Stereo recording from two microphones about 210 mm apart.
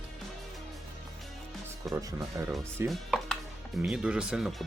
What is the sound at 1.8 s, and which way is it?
Music, centre (ahead or behind).